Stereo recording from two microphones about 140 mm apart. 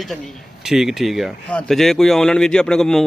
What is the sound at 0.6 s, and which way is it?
A man's voice, 5° right (ahead or behind).